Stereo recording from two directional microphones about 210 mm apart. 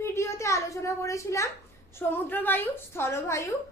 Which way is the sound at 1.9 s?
10° left (ahead or behind).